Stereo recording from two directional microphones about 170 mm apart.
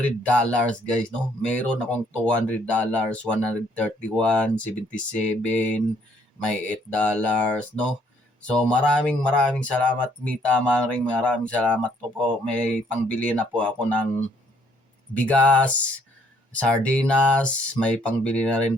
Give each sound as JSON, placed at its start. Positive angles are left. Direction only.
{"t": 0.2, "sound": "speech", "side_deg": 5}
{"t": 15.1, "sound": "speech", "side_deg": 5}